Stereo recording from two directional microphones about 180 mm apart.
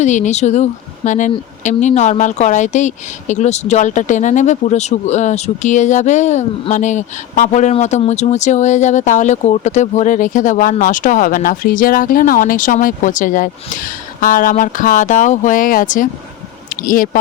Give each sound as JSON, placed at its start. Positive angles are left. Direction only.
{"t": 0.0, "sound": "speech", "side_deg": 40}